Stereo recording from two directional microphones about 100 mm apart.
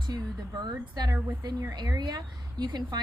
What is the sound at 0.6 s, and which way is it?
A woman's voice, 45° right (ahead or behind).